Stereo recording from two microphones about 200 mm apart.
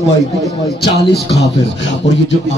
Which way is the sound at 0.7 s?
55° left (ahead or behind).